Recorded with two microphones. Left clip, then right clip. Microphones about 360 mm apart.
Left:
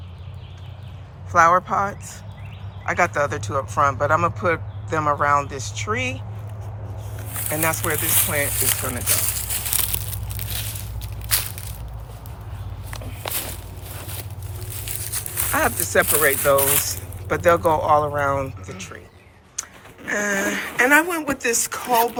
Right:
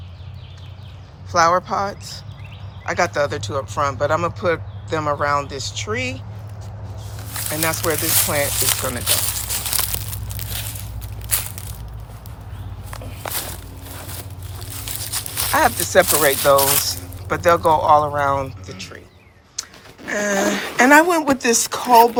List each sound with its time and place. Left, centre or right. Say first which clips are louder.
1.3 s speech: even; centre
7.3 s a sound: right 1 dB; centre
12.9 s walk: right 2 dB; centre
14.8 s speech: right 5 dB; centre
19.6 s a sound: right 2 dB; centre
20.1 s a woman's voice: right 3 dB; centre